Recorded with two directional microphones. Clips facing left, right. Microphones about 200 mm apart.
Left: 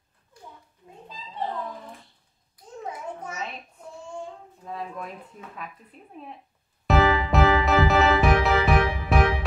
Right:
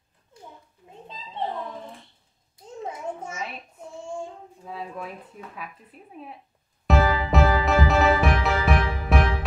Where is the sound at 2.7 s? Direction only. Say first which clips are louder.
Right 2 dB; 25° right (ahead or behind).